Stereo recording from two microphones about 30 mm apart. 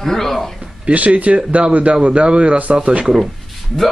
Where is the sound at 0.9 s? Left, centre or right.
Right.